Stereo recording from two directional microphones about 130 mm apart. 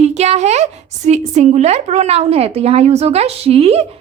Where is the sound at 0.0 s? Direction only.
55° right (ahead or behind).